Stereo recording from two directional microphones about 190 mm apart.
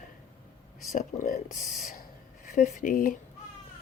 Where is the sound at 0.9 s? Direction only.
45° left (ahead or behind).